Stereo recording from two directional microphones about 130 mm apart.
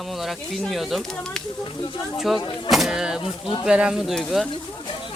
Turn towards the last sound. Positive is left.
turn(degrees=0)  # may be behind; listen again after turning